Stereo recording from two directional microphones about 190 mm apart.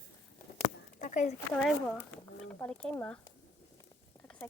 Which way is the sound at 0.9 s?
40° left (ahead or behind).